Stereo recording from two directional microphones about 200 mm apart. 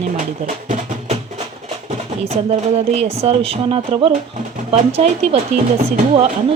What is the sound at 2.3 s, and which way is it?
Speech, 35° right (ahead or behind).